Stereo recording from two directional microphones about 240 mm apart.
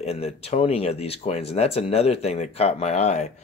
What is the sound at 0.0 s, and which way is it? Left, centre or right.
Speech, left.